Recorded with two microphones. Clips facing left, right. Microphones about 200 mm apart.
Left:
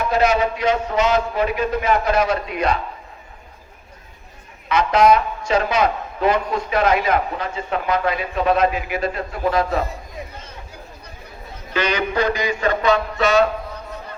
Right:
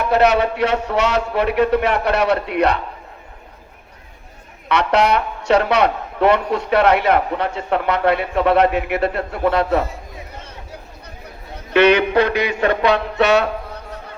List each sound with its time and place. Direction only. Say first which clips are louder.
0.0 s a man's voice: right 3 dB; 65° right (ahead or behind)
4.7 s a man's voice: left 1 dB; 70° right (ahead or behind)
11.7 s a sound: right 8 dB; 65° right (ahead or behind)